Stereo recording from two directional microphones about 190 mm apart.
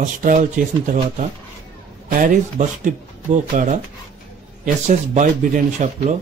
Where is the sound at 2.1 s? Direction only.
45° right (ahead or behind).